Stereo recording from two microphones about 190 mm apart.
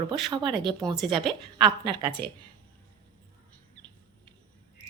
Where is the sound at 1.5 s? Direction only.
25° right (ahead or behind).